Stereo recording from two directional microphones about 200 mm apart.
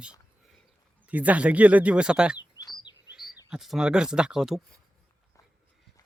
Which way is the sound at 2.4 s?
20° left (ahead or behind).